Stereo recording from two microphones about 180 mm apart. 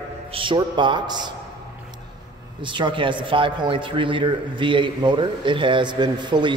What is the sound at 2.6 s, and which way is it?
A man's voice, 25° right (ahead or behind).